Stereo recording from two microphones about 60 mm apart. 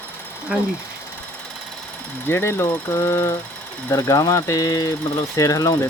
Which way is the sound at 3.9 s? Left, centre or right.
Left.